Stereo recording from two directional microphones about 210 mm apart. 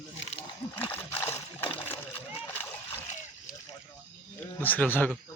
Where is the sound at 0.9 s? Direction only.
10° left (ahead or behind).